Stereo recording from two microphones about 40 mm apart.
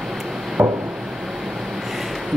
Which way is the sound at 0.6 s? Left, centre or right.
Right.